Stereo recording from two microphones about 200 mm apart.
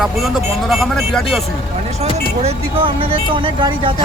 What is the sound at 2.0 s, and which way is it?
Speech, 30° right (ahead or behind).